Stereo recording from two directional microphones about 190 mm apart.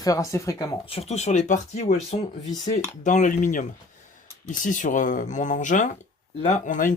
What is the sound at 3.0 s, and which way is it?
Speech, 40° left (ahead or behind).